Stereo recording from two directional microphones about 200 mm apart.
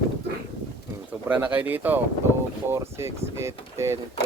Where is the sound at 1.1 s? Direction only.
10° right (ahead or behind).